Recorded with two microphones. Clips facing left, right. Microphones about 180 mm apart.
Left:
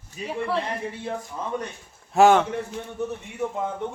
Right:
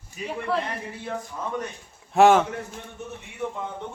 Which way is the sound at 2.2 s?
Centre (ahead or behind).